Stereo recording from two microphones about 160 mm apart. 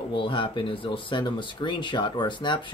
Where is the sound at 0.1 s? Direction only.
30° left (ahead or behind).